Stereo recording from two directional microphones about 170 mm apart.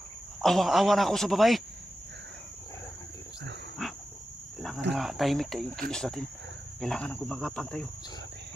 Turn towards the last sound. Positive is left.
turn(degrees=5)  # may be behind; listen again after turning